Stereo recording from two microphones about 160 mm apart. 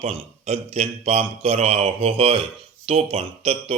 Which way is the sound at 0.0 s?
40° right (ahead or behind).